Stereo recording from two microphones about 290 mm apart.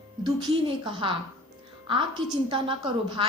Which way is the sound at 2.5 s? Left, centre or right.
Centre.